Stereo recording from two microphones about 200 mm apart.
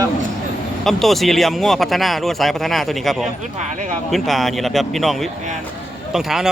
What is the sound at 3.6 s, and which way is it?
Speech, 35° right (ahead or behind).